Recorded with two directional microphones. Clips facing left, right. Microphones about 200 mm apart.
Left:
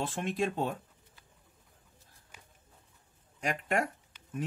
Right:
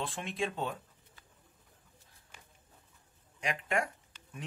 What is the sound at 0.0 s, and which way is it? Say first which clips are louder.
Speech: left 4 dB; 45° left (ahead or behind).